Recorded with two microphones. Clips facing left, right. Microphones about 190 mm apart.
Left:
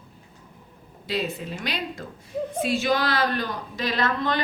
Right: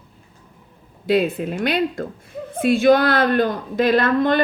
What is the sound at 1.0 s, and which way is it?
A woman's voice, 55° right (ahead or behind).